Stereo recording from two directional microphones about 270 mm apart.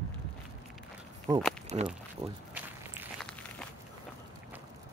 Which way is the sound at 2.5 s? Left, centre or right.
Centre.